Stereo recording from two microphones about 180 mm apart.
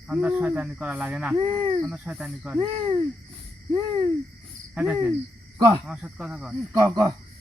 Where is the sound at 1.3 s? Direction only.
30° right (ahead or behind).